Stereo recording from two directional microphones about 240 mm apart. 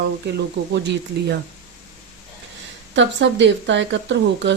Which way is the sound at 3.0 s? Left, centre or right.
Right.